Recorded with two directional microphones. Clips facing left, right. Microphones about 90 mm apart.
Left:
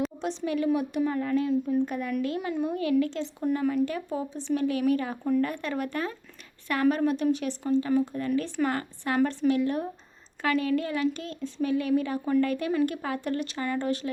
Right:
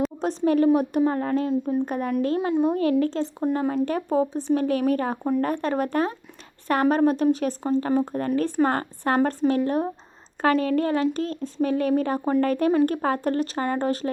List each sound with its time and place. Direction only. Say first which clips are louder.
0.2 s speech: right 8 dB; 45° right (ahead or behind)
2.5 s speech: right 7 dB; 25° right (ahead or behind)
3.0 s speech: right 4 dB; 40° right (ahead or behind)